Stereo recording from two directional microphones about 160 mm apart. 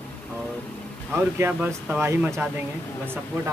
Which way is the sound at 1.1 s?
15° right (ahead or behind).